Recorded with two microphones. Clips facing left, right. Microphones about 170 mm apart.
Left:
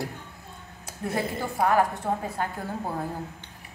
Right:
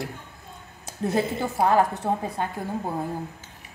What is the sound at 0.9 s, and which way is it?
A woman's voice, 25° right (ahead or behind).